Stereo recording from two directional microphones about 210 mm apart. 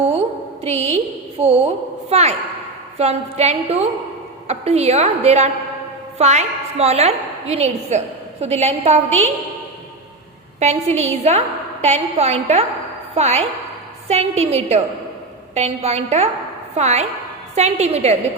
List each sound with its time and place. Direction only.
0.6 s a woman's voice: 30° right (ahead or behind)
10.6 s a woman's voice: 35° right (ahead or behind)